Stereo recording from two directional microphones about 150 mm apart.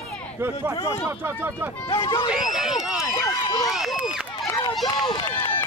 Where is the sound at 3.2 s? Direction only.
30° left (ahead or behind).